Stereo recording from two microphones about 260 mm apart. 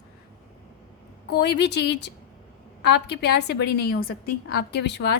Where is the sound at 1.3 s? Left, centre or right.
Left.